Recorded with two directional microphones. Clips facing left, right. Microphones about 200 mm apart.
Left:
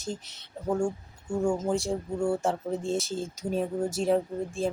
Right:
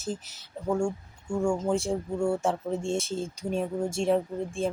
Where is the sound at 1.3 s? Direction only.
20° left (ahead or behind).